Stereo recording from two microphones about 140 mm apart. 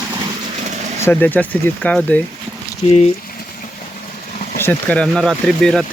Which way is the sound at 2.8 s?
50° left (ahead or behind).